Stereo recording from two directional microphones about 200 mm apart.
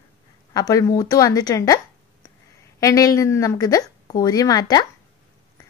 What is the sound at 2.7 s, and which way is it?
Speech, 15° left (ahead or behind).